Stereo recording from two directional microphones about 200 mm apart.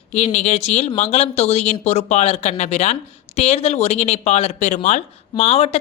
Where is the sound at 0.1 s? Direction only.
35° left (ahead or behind).